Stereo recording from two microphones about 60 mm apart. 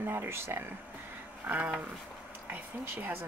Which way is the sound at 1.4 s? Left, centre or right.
Right.